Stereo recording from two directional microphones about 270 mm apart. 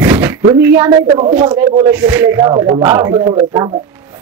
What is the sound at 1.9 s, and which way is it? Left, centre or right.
A man's voice, centre.